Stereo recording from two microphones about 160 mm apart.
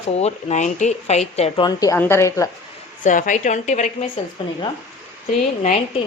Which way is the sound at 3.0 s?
55° left (ahead or behind).